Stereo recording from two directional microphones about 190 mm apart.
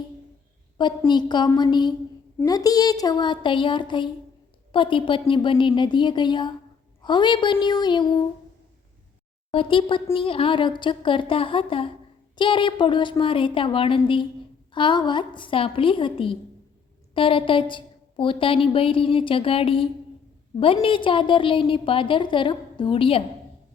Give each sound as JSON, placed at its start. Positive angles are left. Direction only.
{"t": 0.8, "sound": "a woman's voice", "side_deg": 25}
{"t": 9.5, "sound": "a woman's voice", "side_deg": 25}